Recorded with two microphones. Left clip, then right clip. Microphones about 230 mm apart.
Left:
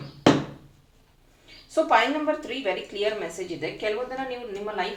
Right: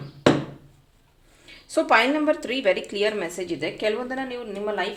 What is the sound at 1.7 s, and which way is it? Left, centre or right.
Speech, right.